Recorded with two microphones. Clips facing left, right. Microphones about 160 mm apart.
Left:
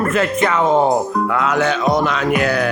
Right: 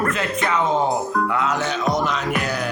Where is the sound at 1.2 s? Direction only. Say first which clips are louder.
Left 5 dB; 60° left (ahead or behind).